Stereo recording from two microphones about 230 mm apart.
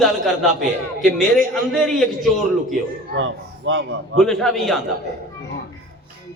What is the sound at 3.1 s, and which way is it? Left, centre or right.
Speech, right.